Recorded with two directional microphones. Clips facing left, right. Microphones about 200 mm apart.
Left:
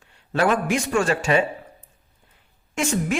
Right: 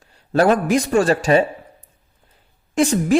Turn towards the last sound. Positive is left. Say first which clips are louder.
# right 7 dB
turn(degrees=-35)  # may be behind; listen again after turning